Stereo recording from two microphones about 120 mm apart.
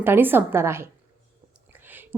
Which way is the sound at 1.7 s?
15° right (ahead or behind).